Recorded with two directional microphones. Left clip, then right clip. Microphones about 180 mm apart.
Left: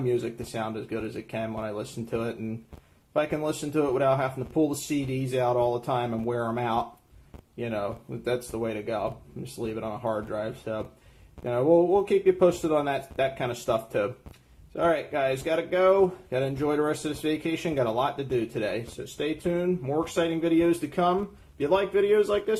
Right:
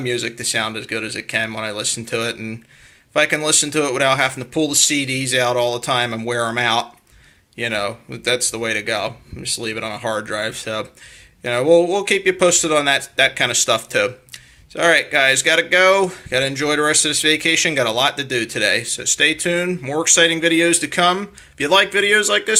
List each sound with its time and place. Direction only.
0.0 s speech: centre (ahead or behind)